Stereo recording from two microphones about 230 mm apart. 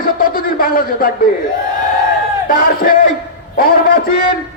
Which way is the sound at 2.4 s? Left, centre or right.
Left.